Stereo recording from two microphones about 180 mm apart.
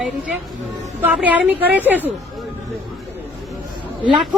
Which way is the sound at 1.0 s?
10° right (ahead or behind).